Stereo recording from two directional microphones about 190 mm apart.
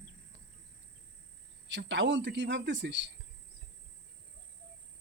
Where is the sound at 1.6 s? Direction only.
75° right (ahead or behind).